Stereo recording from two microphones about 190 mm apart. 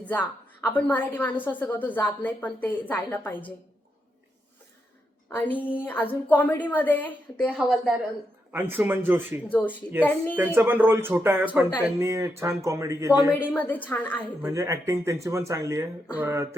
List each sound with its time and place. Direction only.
0.0 s a woman's voice: 10° left (ahead or behind)
5.3 s a woman's voice: 10° left (ahead or behind)
8.5 s speech: 10° right (ahead or behind)
9.5 s a woman's voice: 10° left (ahead or behind)
10.3 s speech: 10° right (ahead or behind)
13.5 s a woman's voice: 10° left (ahead or behind)
14.4 s speech: 15° right (ahead or behind)